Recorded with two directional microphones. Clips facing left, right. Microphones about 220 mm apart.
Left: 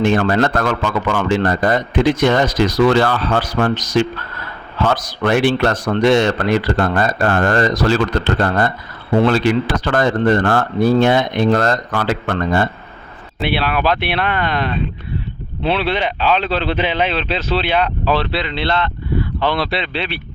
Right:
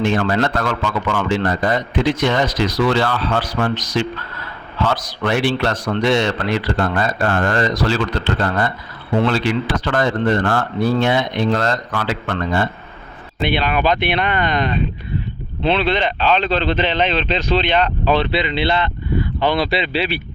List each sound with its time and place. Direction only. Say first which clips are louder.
0.0 s a man's voice: left 3 dB; 50° left (ahead or behind)
13.4 s a man's voice: even; 5° left (ahead or behind)